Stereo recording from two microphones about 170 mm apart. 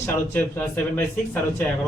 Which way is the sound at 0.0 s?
15° left (ahead or behind).